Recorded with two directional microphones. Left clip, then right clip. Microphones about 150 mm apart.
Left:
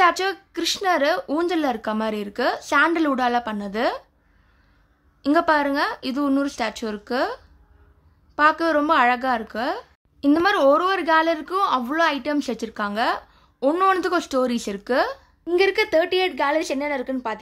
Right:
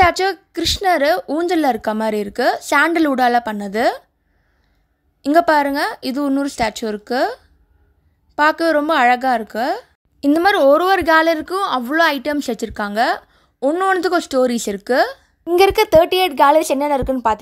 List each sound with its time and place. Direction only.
0.0 s a woman's voice: 35° right (ahead or behind)
5.2 s a woman's voice: 35° right (ahead or behind)
15.5 s speech: 50° right (ahead or behind)